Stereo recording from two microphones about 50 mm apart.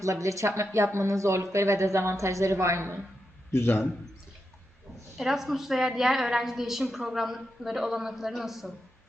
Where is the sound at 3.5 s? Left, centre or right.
Left.